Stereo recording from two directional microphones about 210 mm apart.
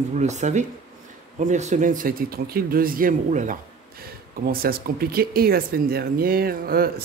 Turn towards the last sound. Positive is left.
turn(degrees=-45)  # may be behind; listen again after turning